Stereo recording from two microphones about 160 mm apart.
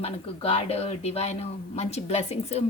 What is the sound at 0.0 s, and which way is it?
Speech, 40° left (ahead or behind).